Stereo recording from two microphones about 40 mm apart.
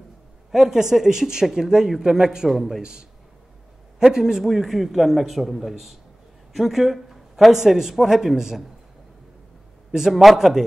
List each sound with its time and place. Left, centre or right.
0.5 s a man's voice: centre
9.9 s speech: centre